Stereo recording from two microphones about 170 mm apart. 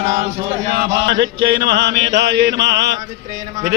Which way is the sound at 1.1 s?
85° right.